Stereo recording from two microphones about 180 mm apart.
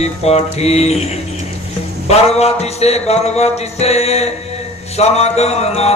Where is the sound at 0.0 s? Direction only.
35° left (ahead or behind).